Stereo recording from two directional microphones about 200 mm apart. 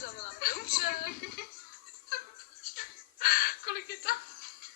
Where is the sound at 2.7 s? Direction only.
45° left (ahead or behind).